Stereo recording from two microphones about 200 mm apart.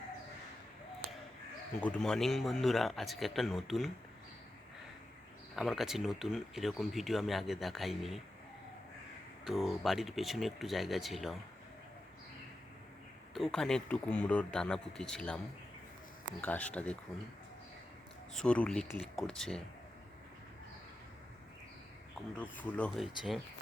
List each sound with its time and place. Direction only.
1.8 s speech: 5° left (ahead or behind)
5.5 s speech: centre (ahead or behind)
9.4 s speech: centre (ahead or behind)
13.3 s speech: centre (ahead or behind)
16.4 s speech: 5° left (ahead or behind)
18.3 s speech: 5° left (ahead or behind)
22.5 s speech: 5° left (ahead or behind)